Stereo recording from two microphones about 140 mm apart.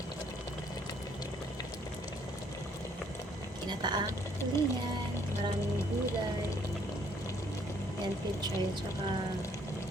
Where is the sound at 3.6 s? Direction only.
30° right (ahead or behind).